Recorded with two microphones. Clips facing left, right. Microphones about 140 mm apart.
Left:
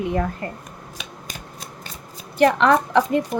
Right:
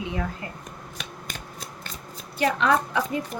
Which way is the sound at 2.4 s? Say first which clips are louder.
Left 6 dB; 60° left (ahead or behind).